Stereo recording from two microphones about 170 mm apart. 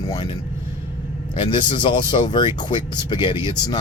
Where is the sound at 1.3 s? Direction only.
30° left (ahead or behind).